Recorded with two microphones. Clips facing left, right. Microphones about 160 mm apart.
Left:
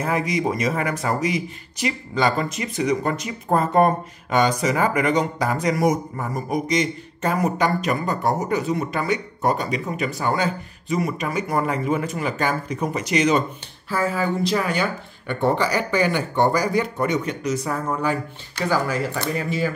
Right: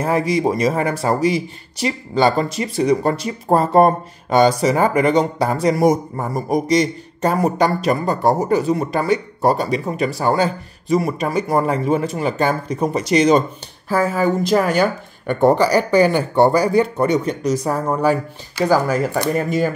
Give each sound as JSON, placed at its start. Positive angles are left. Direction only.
{"t": 0.0, "sound": "speech", "side_deg": -35}